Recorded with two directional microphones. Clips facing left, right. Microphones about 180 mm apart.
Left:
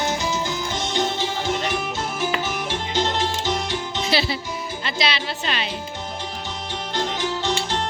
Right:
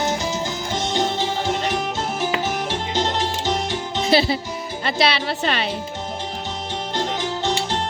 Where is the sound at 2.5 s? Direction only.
40° right (ahead or behind).